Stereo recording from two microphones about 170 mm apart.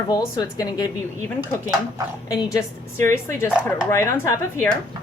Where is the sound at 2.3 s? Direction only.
15° left (ahead or behind).